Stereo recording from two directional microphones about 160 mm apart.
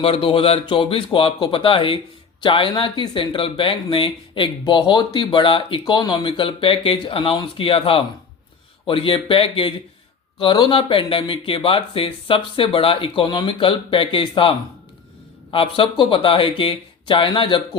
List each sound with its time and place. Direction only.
0.0 s speech: 35° left (ahead or behind)